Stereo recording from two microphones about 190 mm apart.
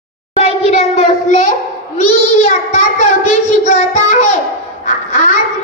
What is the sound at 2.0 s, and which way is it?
A child's voice, 35° left (ahead or behind).